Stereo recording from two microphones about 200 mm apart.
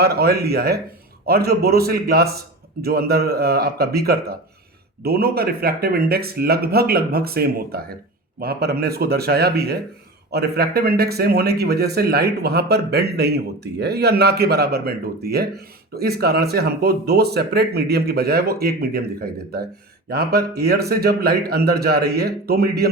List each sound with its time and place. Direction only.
0.0 s a man's voice: 50° right (ahead or behind)